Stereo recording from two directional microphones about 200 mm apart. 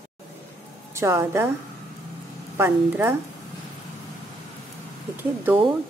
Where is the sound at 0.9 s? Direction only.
15° right (ahead or behind).